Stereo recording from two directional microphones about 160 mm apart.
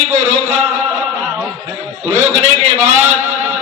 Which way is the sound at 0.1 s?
45° right (ahead or behind).